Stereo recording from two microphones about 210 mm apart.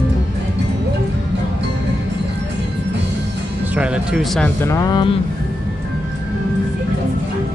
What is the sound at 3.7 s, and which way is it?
Speech, 5° right (ahead or behind).